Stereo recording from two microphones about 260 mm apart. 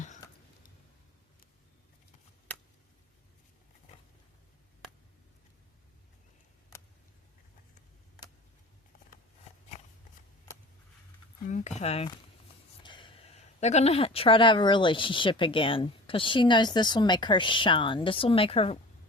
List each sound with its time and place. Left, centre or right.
9.7 s shuffling cards: left
11.4 s a sound: left
12.8 s speech: centre